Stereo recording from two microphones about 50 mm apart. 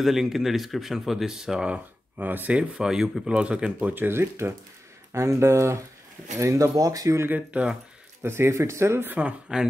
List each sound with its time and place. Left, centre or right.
0.0 s speech: centre
1.7 s speech: right
2.5 s speech: right
2.8 s speech: centre
3.3 s speech: right
3.9 s speech: right
4.2 s speech: right
5.1 s speech: right
6.3 s speech: right
7.2 s speech: right
8.2 s speech: right
9.0 s speech: right
9.5 s speech: centre